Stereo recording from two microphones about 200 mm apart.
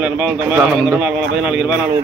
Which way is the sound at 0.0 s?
5° right (ahead or behind).